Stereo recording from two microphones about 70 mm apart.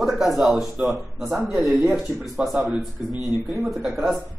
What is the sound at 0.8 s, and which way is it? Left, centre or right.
Speech, right.